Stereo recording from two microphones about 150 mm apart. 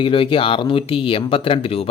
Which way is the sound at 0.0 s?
35° left (ahead or behind).